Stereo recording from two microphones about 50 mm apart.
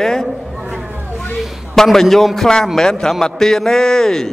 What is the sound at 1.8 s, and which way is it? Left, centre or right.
A man's voice, centre.